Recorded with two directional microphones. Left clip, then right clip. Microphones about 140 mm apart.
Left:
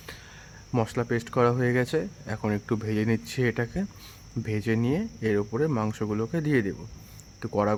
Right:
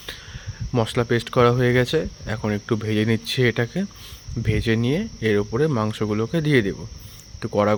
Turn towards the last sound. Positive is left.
turn(degrees=-15)  # may be behind; listen again after turning